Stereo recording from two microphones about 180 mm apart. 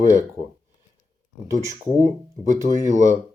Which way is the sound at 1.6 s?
15° right (ahead or behind).